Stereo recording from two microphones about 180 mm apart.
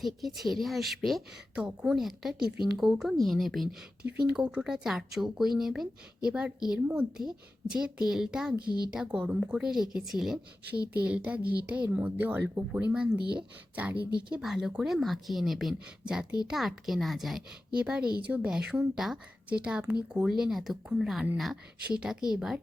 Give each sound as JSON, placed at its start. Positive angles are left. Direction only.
{"t": 0.0, "sound": "speech", "side_deg": 0}
{"t": 13.9, "sound": "speech", "side_deg": -60}
{"t": 14.3, "sound": "speech", "side_deg": -5}
{"t": 18.0, "sound": "speech", "side_deg": -55}
{"t": 18.3, "sound": "speech", "side_deg": -5}